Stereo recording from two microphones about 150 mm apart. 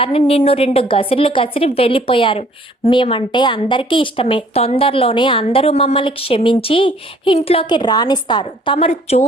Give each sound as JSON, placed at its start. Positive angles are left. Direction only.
{"t": 0.0, "sound": "a woman's voice", "side_deg": 40}